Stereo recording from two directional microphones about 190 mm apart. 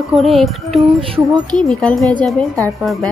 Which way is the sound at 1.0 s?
25° right (ahead or behind).